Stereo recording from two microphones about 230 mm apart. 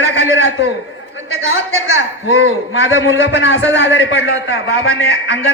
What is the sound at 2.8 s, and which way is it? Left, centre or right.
A man's voice, left.